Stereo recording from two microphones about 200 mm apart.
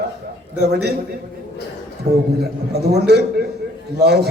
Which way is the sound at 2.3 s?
55° right (ahead or behind).